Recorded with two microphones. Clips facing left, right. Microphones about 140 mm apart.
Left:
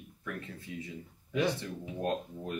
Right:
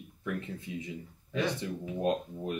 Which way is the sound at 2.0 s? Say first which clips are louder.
Right 3 dB; 15° right (ahead or behind).